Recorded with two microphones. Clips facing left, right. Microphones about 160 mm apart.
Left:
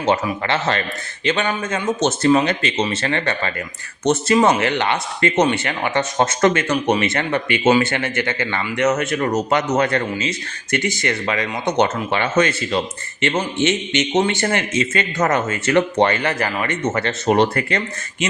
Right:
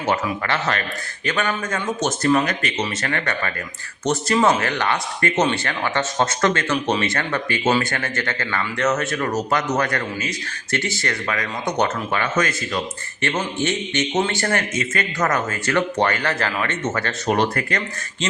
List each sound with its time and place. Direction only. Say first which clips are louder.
0.0 s speech: left 3 dB; 25° left (ahead or behind)